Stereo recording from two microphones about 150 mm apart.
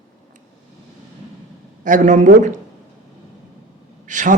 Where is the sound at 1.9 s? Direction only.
55° right (ahead or behind).